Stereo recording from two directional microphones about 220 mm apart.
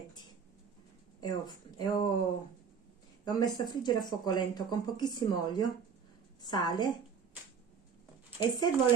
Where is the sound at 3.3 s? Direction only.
20° left (ahead or behind).